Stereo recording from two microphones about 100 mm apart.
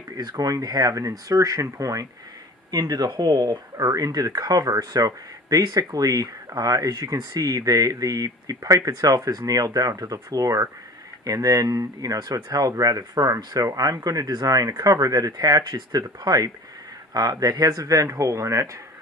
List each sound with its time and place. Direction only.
0.2 s speech: 40° right (ahead or behind)